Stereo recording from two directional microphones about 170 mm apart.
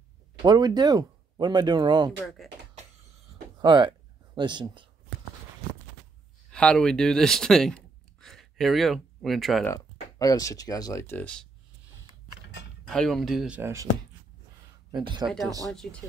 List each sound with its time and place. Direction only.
0.4 s speech: 25° right (ahead or behind)
2.1 s speech: centre (ahead or behind)
3.5 s speech: 25° right (ahead or behind)
6.5 s speech: 5° left (ahead or behind)
9.8 s speech: 20° left (ahead or behind)
12.8 s speech: centre (ahead or behind)
13.6 s speech: 15° right (ahead or behind)
14.9 s speech: 30° right (ahead or behind)
15.2 s speech: centre (ahead or behind)